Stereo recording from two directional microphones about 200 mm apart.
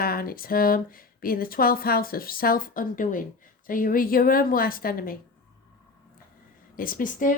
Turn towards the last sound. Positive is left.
turn(degrees=45)  # may be behind; listen again after turning